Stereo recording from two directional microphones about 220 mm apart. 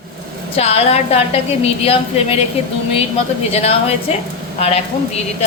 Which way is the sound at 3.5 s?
30° left (ahead or behind).